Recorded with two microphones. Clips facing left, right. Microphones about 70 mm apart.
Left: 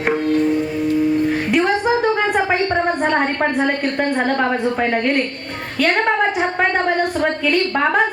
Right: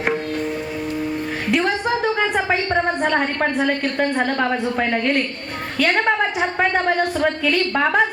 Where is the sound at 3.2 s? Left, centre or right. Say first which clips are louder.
Left 2 dB; left.